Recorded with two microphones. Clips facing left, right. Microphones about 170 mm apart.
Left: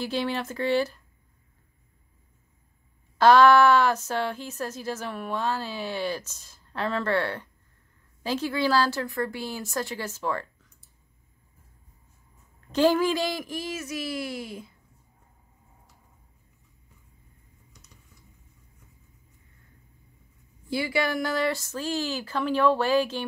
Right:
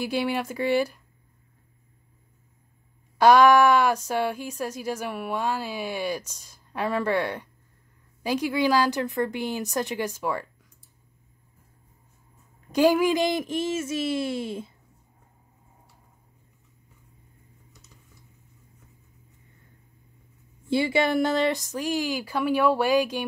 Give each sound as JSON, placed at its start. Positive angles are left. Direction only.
{"t": 0.0, "sound": "speech", "side_deg": -10}
{"t": 3.2, "sound": "speech", "side_deg": -10}
{"t": 12.7, "sound": "speech", "side_deg": -10}
{"t": 20.6, "sound": "speech", "side_deg": -25}